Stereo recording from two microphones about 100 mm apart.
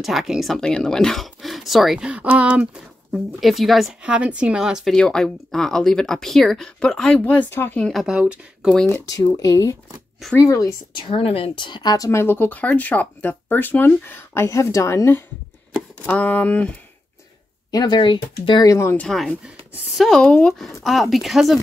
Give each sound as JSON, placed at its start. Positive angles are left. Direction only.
{"t": 0.0, "sound": "speech", "side_deg": 0}
{"t": 4.0, "sound": "speech", "side_deg": -15}
{"t": 4.9, "sound": "speech", "side_deg": 5}
{"t": 7.8, "sound": "speech", "side_deg": 0}
{"t": 9.1, "sound": "speech", "side_deg": 35}
{"t": 11.0, "sound": "speech", "side_deg": 70}
{"t": 12.1, "sound": "speech", "side_deg": 25}
{"t": 16.1, "sound": "speech", "side_deg": 15}
{"t": 17.6, "sound": "speech", "side_deg": 40}
{"t": 18.6, "sound": "speech", "side_deg": 30}
{"t": 18.9, "sound": "speech", "side_deg": 5}